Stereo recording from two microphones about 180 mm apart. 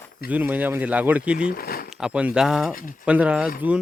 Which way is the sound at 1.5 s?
55° left (ahead or behind).